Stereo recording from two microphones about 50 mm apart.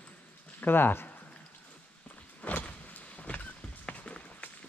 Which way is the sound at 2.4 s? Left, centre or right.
Left.